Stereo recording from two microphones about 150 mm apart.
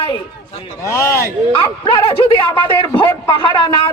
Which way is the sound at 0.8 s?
20° left (ahead or behind).